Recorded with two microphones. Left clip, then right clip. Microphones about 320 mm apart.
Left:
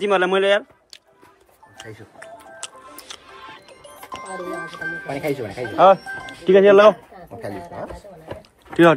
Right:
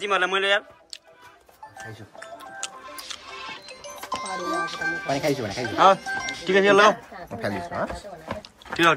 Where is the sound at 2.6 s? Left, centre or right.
Centre.